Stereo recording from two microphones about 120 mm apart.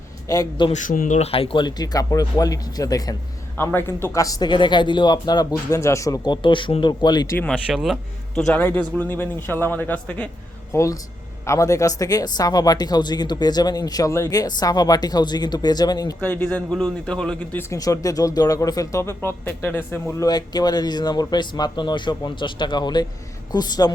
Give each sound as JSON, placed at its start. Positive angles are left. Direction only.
{"t": 0.3, "sound": "speech", "side_deg": 30}
{"t": 0.7, "sound": "speech", "side_deg": 90}
{"t": 1.3, "sound": "speech", "side_deg": 50}
{"t": 1.6, "sound": "speech", "side_deg": 35}
{"t": 3.6, "sound": "speech", "side_deg": 20}
{"t": 7.5, "sound": "speech", "side_deg": -5}
{"t": 8.4, "sound": "a man's voice", "side_deg": 10}
{"t": 10.7, "sound": "speech", "side_deg": 25}
{"t": 16.2, "sound": "a man's voice", "side_deg": 15}
{"t": 17.6, "sound": "speech", "side_deg": 30}
{"t": 20.2, "sound": "speech", "side_deg": 35}